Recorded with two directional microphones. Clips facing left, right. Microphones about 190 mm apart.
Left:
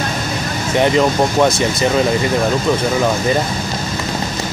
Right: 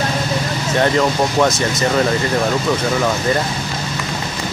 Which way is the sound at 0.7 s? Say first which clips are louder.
Left 2 dB; 15° left (ahead or behind).